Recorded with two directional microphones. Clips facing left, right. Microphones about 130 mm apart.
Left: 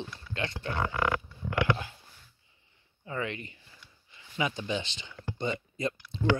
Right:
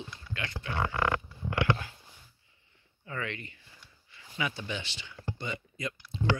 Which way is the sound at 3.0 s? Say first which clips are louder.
Left 3 dB; 20° left (ahead or behind).